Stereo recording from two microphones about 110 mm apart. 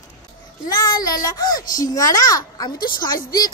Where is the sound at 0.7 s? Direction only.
35° left (ahead or behind).